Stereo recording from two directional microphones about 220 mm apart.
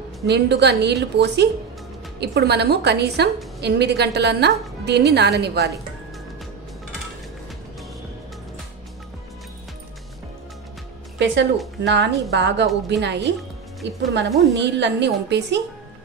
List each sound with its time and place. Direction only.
0.3 s a woman's voice: 50° right (ahead or behind)
11.1 s a woman's voice: 55° right (ahead or behind)